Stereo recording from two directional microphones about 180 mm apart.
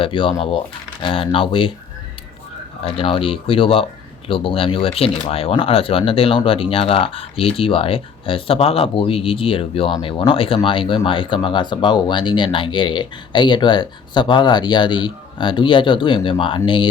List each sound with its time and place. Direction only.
0.0 s speech: 30° left (ahead or behind)
2.8 s speech: 30° left (ahead or behind)